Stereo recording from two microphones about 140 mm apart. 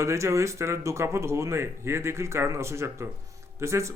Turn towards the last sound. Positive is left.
turn(degrees=-20)  # may be behind; listen again after turning